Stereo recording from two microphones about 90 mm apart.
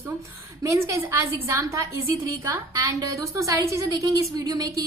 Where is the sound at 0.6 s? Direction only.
30° right (ahead or behind).